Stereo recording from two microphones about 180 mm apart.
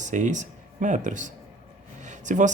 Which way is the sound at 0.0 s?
40° right (ahead or behind).